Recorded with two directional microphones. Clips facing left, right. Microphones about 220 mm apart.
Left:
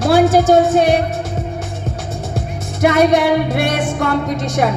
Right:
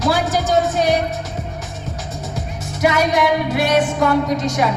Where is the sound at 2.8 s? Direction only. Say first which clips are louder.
Left 5 dB; 55° left (ahead or behind).